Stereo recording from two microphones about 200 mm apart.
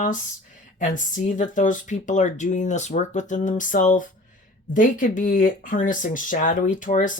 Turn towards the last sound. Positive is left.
turn(degrees=40)  # may be behind; listen again after turning